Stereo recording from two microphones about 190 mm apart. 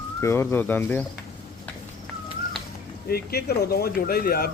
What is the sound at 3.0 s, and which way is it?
Speech, 55° left (ahead or behind).